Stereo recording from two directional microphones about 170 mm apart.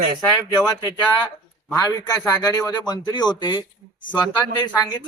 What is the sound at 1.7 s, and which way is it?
Speech, 20° left (ahead or behind).